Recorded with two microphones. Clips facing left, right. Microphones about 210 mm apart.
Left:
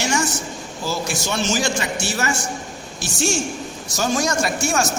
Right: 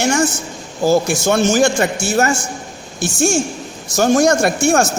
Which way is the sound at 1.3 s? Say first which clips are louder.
Right 9 dB; 50° right (ahead or behind).